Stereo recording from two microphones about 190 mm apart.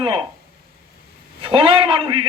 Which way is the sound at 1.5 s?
25° right (ahead or behind).